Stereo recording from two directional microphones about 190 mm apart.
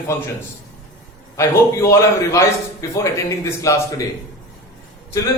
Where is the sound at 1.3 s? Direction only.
15° left (ahead or behind).